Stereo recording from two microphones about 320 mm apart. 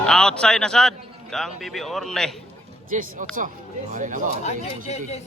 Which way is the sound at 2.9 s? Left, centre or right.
Right.